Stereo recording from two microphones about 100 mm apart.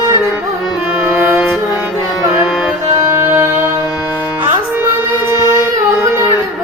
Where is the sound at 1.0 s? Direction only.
20° right (ahead or behind).